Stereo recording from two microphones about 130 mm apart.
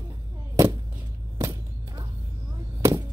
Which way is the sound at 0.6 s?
25° right (ahead or behind).